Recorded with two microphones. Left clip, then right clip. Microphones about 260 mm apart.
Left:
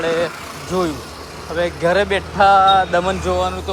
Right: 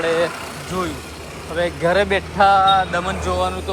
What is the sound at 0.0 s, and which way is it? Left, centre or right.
Speech, centre.